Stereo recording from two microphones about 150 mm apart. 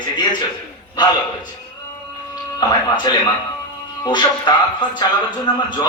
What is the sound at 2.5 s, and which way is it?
A man's voice, 25° left (ahead or behind).